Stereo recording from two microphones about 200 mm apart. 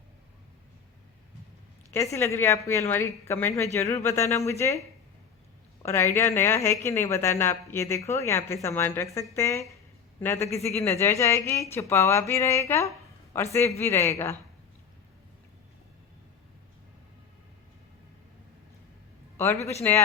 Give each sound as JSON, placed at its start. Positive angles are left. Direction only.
{"t": 1.9, "sound": "a woman's voice", "side_deg": 15}
{"t": 5.8, "sound": "a woman's voice", "side_deg": 15}
{"t": 10.6, "sound": "speech", "side_deg": 30}
{"t": 10.8, "sound": "a woman's voice", "side_deg": 15}
{"t": 19.9, "sound": "a woman's voice", "side_deg": 10}